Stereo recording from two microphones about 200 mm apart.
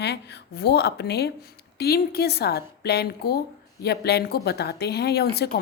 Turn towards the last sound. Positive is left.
turn(degrees=55)  # may be behind; listen again after turning